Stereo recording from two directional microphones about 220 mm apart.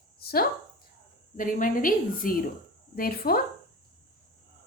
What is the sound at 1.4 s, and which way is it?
A woman's voice, 35° left (ahead or behind).